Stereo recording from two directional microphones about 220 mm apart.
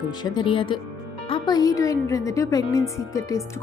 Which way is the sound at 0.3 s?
20° left (ahead or behind).